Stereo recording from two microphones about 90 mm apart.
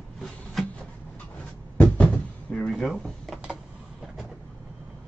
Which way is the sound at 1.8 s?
15° left (ahead or behind).